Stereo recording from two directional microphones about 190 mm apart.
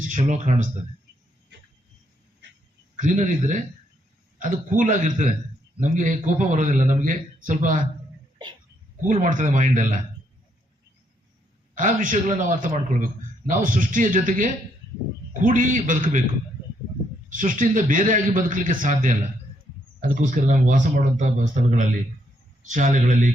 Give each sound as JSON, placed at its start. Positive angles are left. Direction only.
{"t": 0.1, "sound": "a man's voice", "side_deg": -40}
{"t": 2.9, "sound": "a man's voice", "side_deg": -40}
{"t": 9.0, "sound": "a man's voice", "side_deg": -40}
{"t": 11.7, "sound": "a man's voice", "side_deg": -45}
{"t": 17.2, "sound": "a man's voice", "side_deg": -45}